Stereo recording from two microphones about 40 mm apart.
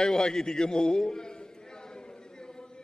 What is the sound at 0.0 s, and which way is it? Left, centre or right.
A man's voice, centre.